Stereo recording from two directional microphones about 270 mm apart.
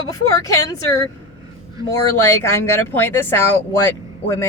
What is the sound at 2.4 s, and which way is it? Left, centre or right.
A woman's voice, centre.